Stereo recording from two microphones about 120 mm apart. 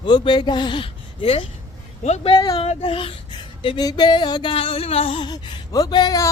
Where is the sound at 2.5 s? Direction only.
50° left (ahead or behind).